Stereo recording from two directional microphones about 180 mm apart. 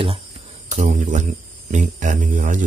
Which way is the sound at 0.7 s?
45° right (ahead or behind).